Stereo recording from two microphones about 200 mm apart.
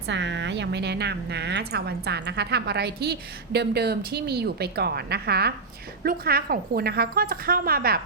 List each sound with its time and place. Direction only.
0.1 s a woman's voice: 65° right (ahead or behind)